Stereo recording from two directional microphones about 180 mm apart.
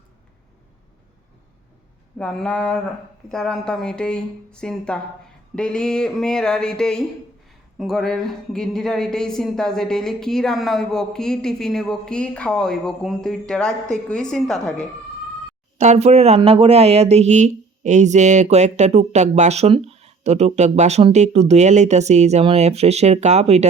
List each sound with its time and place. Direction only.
2.1 s speech: 5° left (ahead or behind)
15.8 s speech: 40° right (ahead or behind)